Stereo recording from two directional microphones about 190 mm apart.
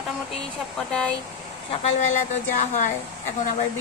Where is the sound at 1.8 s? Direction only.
40° left (ahead or behind).